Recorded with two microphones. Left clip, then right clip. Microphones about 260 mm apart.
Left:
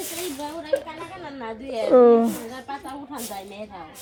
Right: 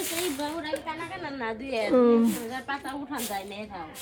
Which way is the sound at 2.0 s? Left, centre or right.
Centre.